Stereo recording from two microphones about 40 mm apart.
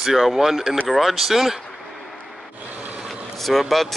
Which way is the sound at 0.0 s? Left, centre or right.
Centre.